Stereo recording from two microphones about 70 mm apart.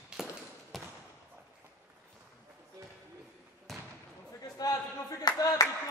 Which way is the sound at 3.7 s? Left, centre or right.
Centre.